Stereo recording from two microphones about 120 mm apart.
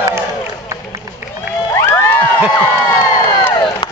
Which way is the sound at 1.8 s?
20° left (ahead or behind).